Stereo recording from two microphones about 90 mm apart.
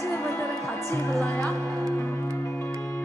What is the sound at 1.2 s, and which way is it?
Speech, 20° left (ahead or behind).